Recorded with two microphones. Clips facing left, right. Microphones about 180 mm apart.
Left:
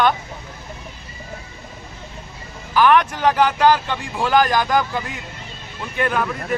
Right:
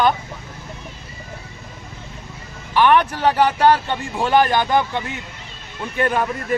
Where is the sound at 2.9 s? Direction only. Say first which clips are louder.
Even; 30° right (ahead or behind).